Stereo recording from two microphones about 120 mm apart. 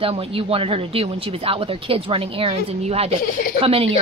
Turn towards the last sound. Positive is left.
turn(degrees=-50)  # may be behind; listen again after turning